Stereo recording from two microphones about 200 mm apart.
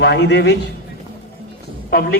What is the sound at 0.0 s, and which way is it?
Speech, 60° left (ahead or behind).